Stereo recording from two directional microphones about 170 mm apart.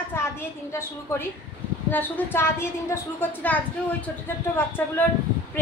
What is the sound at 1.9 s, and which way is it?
A woman's voice, 10° left (ahead or behind).